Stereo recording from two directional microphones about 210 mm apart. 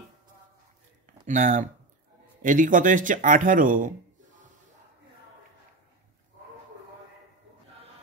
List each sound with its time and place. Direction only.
1.2 s speech: 35° right (ahead or behind)